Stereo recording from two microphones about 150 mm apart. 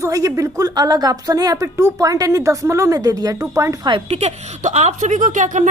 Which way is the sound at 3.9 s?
45° right (ahead or behind).